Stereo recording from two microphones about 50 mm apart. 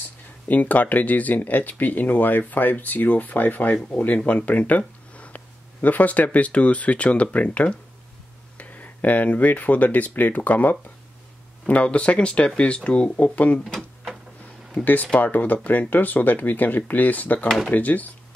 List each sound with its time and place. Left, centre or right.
0.5 s speech: left
13.2 s speech: left
13.7 s a sound: centre
15.1 s speech: left